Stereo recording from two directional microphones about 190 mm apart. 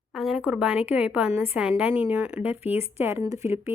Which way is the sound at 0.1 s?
Centre (ahead or behind).